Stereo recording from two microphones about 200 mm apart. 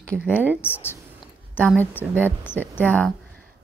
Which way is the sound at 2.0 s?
10° left (ahead or behind).